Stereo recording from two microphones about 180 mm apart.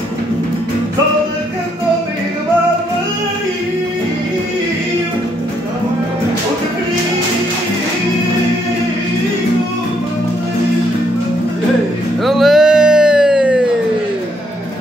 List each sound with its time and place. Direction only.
12.3 s music: centre (ahead or behind)